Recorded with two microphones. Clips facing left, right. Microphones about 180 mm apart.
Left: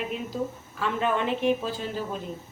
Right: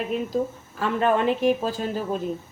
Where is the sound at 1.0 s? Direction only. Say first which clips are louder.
Right 5 dB; 40° right (ahead or behind).